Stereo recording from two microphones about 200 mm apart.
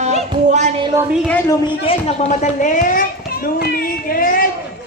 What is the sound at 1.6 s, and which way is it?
A child's voice, 30° left (ahead or behind).